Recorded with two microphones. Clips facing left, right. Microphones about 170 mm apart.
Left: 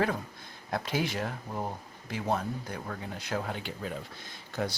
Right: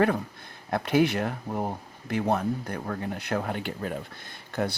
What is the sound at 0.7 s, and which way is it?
Speech, 60° right (ahead or behind).